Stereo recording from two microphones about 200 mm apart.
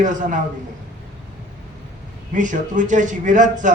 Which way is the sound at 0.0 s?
40° right (ahead or behind).